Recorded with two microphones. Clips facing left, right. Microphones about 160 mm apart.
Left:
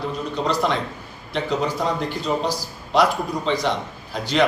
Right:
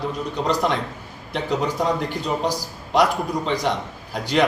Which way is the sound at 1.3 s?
15° right (ahead or behind).